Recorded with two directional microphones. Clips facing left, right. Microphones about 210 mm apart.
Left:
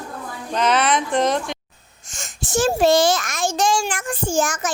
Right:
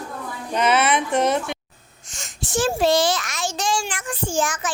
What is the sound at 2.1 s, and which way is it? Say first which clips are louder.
A child's voice: left 2 dB; 45° left (ahead or behind).